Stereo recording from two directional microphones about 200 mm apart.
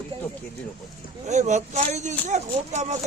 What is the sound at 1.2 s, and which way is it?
Speech, 35° right (ahead or behind).